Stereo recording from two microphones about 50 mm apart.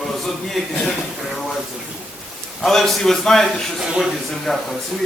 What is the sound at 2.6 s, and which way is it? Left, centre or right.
A man's voice, centre.